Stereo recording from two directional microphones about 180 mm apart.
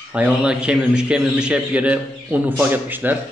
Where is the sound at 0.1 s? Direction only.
5° right (ahead or behind).